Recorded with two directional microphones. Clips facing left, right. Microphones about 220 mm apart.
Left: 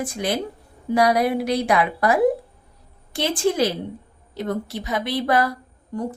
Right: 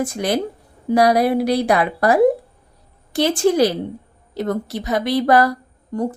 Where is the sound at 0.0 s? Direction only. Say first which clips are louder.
Right 4 dB; 40° right (ahead or behind).